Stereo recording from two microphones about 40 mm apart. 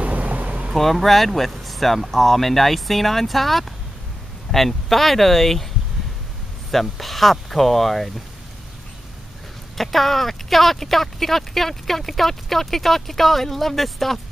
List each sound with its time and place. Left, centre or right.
0.0 s vehicle: right
0.7 s speech: centre
6.7 s speech: centre
9.8 s speech: centre